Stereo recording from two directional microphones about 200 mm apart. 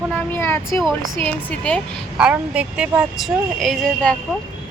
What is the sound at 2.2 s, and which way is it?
Speech, 5° right (ahead or behind).